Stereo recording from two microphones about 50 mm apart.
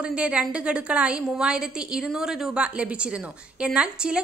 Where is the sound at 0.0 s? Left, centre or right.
Right.